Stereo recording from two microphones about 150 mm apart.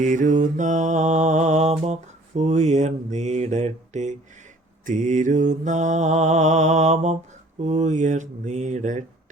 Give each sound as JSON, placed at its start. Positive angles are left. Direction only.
{"t": 0.0, "sound": "mantra", "side_deg": -55}